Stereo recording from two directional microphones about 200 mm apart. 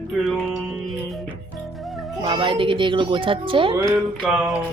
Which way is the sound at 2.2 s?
25° right (ahead or behind).